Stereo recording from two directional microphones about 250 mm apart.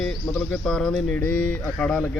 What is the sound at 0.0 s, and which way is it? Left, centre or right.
Speech, centre.